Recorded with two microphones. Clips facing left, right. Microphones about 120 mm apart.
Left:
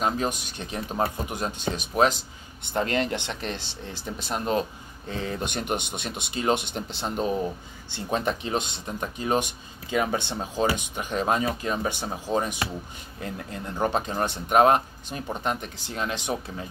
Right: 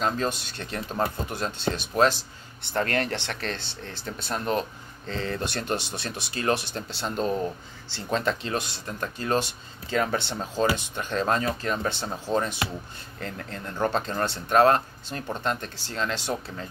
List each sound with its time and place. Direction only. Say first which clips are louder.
0.0 s speech: even; 10° left (ahead or behind)